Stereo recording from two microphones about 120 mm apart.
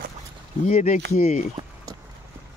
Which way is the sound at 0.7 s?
75° left (ahead or behind).